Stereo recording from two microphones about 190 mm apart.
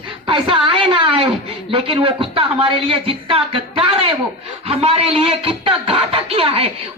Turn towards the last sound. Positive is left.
turn(degrees=-30)  # may be behind; listen again after turning